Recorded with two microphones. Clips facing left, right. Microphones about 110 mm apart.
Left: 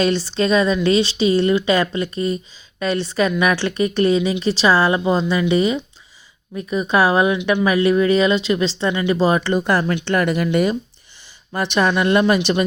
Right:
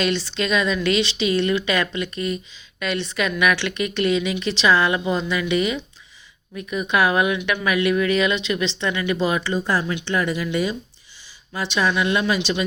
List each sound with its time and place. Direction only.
0.0 s speech: 35° left (ahead or behind)
9.4 s speech: 60° left (ahead or behind)